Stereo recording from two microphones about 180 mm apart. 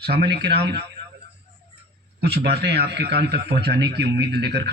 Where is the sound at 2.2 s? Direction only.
60° right (ahead or behind).